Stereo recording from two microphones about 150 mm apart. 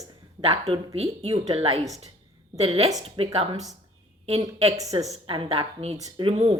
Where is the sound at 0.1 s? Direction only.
40° right (ahead or behind).